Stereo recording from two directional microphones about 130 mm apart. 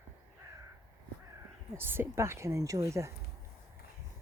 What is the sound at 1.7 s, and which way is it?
Speech, 15° right (ahead or behind).